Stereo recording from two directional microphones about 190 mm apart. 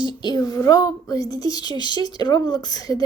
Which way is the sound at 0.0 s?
25° left (ahead or behind).